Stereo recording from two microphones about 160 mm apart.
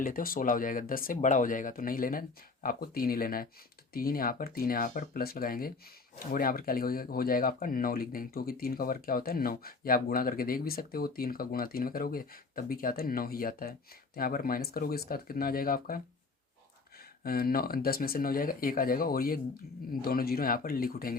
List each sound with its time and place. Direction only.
0.0 s speech: 60° left (ahead or behind)
17.2 s speech: 70° left (ahead or behind)